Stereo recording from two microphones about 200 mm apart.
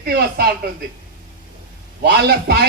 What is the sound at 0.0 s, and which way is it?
Speech, 50° right (ahead or behind).